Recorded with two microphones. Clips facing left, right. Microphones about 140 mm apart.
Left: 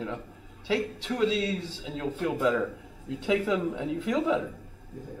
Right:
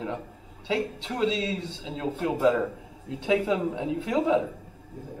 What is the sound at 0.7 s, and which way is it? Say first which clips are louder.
Speech: left 1 dB; 25° right (ahead or behind).